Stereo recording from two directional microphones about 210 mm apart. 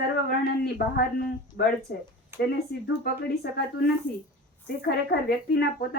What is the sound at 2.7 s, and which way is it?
A woman's voice, 50° left (ahead or behind).